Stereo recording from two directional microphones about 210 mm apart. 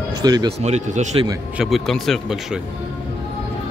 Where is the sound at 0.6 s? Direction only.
35° right (ahead or behind).